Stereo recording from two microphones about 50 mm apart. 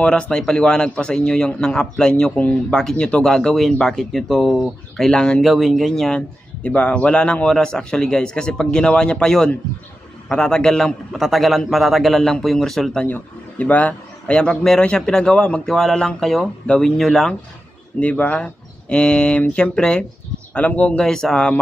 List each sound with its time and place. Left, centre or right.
0.0 s a man's voice: left
2.3 s a man's voice: left
2.7 s a man's voice: centre
3.0 s a man's voice: centre
5.4 s a man's voice: centre
6.1 s a man's voice: left
11.1 s a man's voice: centre
13.0 s a man's voice: left; by 16.4 s centre
16.6 s a man's voice: centre
16.9 s a man's voice: centre
17.9 s a man's voice: left
21.0 s a man's voice: centre